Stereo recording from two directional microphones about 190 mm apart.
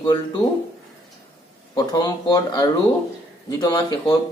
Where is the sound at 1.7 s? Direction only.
20° left (ahead or behind).